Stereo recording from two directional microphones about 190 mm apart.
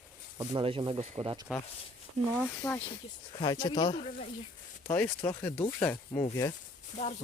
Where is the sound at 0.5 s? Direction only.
25° right (ahead or behind).